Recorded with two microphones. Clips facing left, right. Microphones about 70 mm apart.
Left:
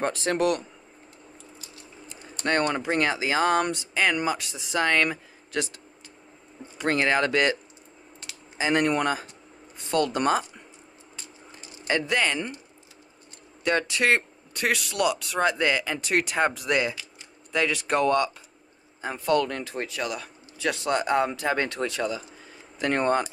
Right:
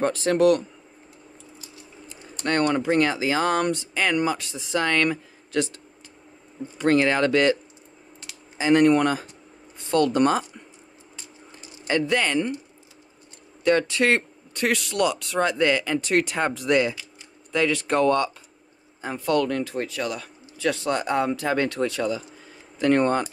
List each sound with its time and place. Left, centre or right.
0.0 s speech: centre
2.4 s speech: centre
8.2 s a sound: centre
9.9 s speech: centre
11.9 s speech: centre
13.7 s a man's voice: centre
19.2 s speech: centre